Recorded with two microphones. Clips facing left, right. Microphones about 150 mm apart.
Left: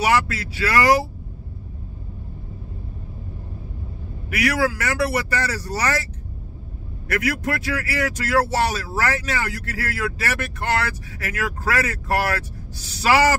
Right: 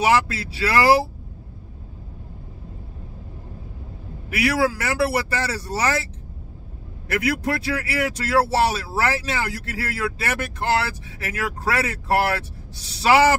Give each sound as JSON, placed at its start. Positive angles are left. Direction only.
{"t": 0.0, "sound": "speech", "side_deg": -25}
{"t": 4.4, "sound": "speech", "side_deg": -30}
{"t": 7.2, "sound": "speech", "side_deg": -30}